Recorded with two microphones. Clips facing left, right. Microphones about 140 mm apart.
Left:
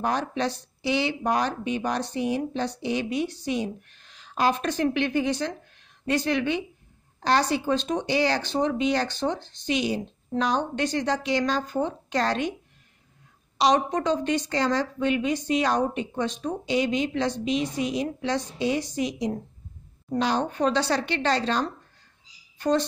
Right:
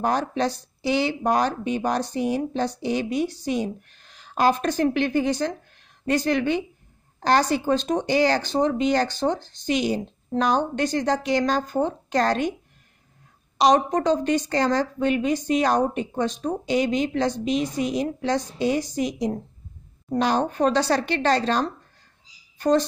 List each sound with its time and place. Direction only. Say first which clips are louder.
0.0 s a woman's voice: right 3 dB; 40° right (ahead or behind)
13.6 s a woman's voice: right 3 dB; 40° right (ahead or behind)